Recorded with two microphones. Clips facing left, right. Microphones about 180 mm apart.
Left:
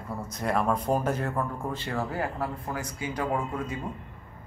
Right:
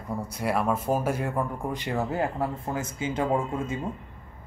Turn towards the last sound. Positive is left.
turn(degrees=-25)  # may be behind; listen again after turning